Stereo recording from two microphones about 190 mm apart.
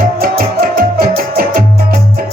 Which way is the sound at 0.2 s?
50° right (ahead or behind).